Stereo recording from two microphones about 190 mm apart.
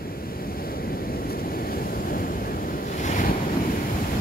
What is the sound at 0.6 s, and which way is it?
Waves, 50° left (ahead or behind).